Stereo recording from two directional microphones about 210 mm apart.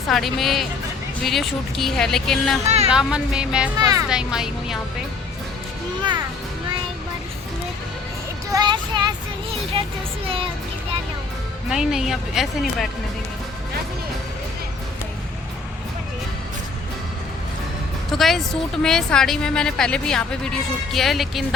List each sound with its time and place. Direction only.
0.1 s a woman's voice: centre (ahead or behind)
2.6 s speech: 30° right (ahead or behind)
2.9 s a woman's voice: 5° right (ahead or behind)
3.8 s speech: 15° right (ahead or behind)
4.1 s a woman's voice: 5° right (ahead or behind)
8.5 s child singing: 20° right (ahead or behind)
11.7 s a woman's voice: centre (ahead or behind)
18.1 s a woman's voice: centre (ahead or behind)